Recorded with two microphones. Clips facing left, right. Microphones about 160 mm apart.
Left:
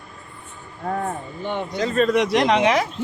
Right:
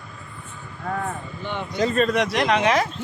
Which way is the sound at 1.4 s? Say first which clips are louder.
Left 4 dB; 45° left (ahead or behind).